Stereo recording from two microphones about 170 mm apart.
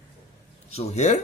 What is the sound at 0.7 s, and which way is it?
Speech, 40° left (ahead or behind).